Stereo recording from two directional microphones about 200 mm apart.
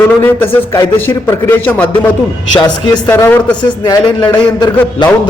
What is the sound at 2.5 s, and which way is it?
A man's voice, 20° left (ahead or behind).